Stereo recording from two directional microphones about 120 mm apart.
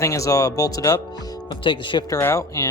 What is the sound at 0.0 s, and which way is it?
Speech, 25° left (ahead or behind).